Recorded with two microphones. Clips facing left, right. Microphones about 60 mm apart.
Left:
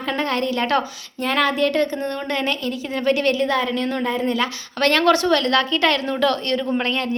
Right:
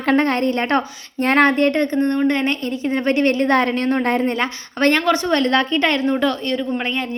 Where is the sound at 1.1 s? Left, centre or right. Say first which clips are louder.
Right 5 dB; right.